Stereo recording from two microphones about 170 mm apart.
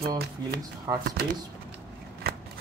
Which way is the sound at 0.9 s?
20° right (ahead or behind).